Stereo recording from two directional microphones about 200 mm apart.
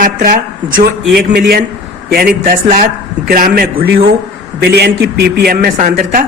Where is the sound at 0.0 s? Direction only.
45° right (ahead or behind).